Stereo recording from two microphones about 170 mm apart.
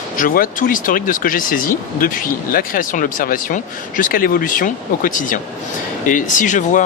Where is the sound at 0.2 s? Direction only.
55° left (ahead or behind).